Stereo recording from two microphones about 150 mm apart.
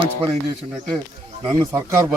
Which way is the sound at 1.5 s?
20° right (ahead or behind).